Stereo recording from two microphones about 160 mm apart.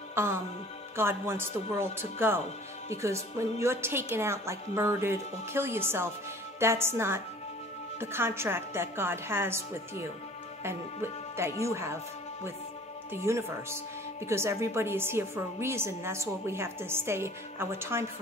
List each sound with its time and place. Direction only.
0.1 s a woman's voice: 15° right (ahead or behind)
13.1 s a woman's voice: 15° right (ahead or behind)